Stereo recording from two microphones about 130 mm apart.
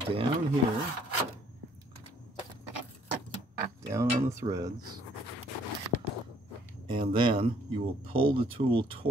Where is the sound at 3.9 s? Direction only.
25° right (ahead or behind).